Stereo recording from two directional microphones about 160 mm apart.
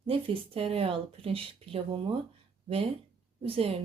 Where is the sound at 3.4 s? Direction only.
35° right (ahead or behind).